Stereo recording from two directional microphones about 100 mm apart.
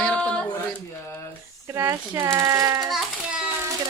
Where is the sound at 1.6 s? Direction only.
30° right (ahead or behind).